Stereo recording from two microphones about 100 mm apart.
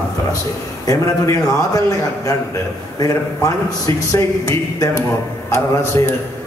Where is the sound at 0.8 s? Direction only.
35° left (ahead or behind).